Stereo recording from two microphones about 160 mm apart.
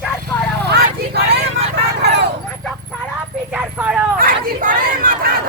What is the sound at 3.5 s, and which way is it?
Clip-clop, 10° right (ahead or behind).